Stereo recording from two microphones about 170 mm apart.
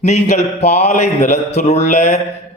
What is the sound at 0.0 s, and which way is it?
A man's voice, 40° left (ahead or behind).